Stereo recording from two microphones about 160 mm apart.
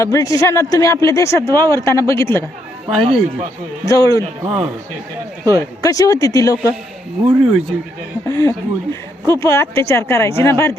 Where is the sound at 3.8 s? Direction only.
20° left (ahead or behind).